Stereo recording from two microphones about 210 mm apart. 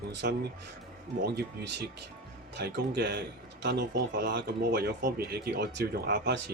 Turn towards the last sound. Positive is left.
turn(degrees=-55)  # may be behind; listen again after turning